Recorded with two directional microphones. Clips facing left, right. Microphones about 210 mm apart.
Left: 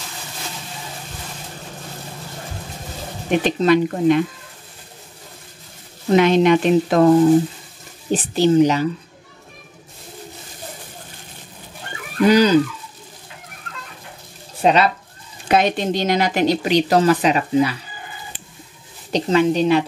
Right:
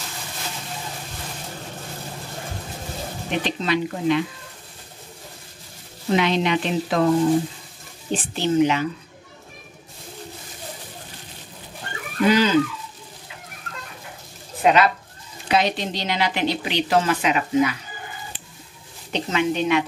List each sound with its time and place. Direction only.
3.3 s a woman's voice: 50° left (ahead or behind)
6.1 s a woman's voice: 50° left (ahead or behind)
8.1 s speech: 40° left (ahead or behind)
12.3 s speech: 40° left (ahead or behind)
14.6 s speech: 30° left (ahead or behind)
15.4 s a woman's voice: 50° left (ahead or behind); by 17.7 s 35° left (ahead or behind)
19.1 s speech: 35° left (ahead or behind)